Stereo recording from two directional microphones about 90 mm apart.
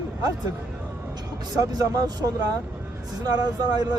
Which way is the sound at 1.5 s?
40° right (ahead or behind).